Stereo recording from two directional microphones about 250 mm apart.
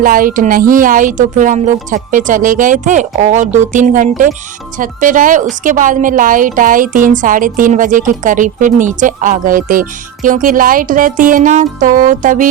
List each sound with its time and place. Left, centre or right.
0.0 s a woman's voice: right